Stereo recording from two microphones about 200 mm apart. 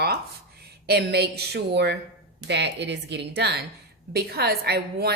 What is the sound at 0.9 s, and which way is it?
A woman's voice, 55° right (ahead or behind).